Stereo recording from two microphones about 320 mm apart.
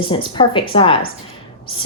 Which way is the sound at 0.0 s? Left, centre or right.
Centre.